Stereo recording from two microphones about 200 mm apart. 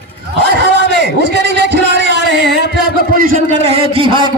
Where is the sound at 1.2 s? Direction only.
55° right (ahead or behind).